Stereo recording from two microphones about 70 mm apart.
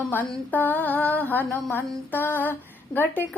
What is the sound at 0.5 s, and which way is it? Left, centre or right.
A woman's voice, left.